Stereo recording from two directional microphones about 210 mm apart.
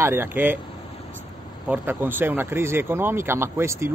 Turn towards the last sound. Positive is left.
turn(degrees=-15)  # may be behind; listen again after turning